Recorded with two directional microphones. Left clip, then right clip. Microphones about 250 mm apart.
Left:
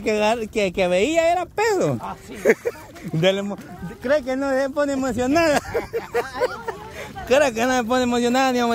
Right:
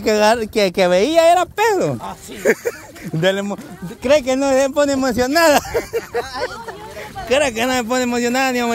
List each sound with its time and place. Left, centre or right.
0.0 s a man's voice: centre
4.3 s speech: right
7.2 s a man's voice: centre